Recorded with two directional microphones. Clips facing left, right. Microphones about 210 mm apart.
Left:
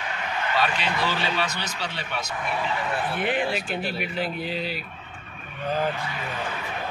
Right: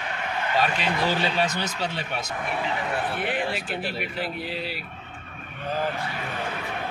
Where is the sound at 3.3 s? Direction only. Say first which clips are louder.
Left 2 dB; 5° right (ahead or behind).